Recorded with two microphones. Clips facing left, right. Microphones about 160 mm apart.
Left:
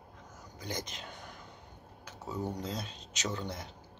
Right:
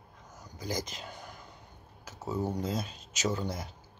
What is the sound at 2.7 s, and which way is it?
Speech, 5° right (ahead or behind).